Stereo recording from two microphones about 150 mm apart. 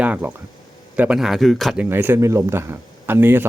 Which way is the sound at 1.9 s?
15° right (ahead or behind).